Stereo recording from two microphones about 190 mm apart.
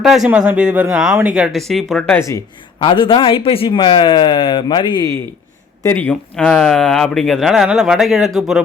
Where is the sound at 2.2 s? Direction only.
20° left (ahead or behind).